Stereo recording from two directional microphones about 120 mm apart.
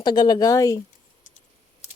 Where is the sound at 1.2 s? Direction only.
90° left.